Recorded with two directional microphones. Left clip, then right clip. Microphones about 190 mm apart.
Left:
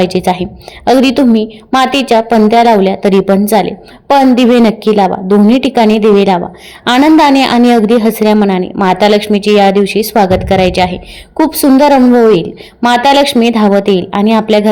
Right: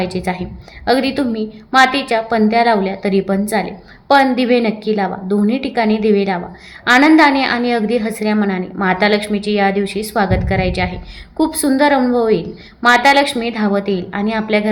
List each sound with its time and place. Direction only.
0.0 s a woman's voice: 35° left (ahead or behind)